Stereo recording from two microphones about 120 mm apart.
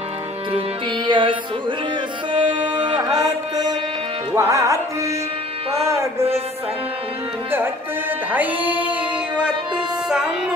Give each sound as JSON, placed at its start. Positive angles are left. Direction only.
{"t": 0.5, "sound": "music", "side_deg": -45}
{"t": 2.3, "sound": "music", "side_deg": -40}
{"t": 4.3, "sound": "tabla", "side_deg": -25}
{"t": 5.9, "sound": "music", "side_deg": -25}
{"t": 8.3, "sound": "music", "side_deg": -15}
{"t": 10.0, "sound": "music", "side_deg": -5}